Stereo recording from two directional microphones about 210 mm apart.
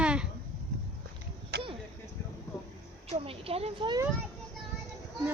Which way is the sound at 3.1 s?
25° right (ahead or behind).